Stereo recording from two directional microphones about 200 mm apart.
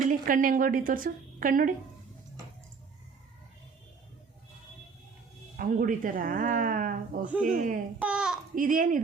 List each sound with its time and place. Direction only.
0.1 s a woman's voice: 40° right (ahead or behind)
5.5 s a woman's voice: 45° right (ahead or behind)
8.0 s a sound: 5° right (ahead or behind)
8.5 s a woman's voice: 45° right (ahead or behind)